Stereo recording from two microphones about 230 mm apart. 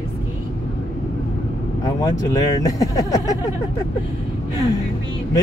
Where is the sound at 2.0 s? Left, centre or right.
Centre.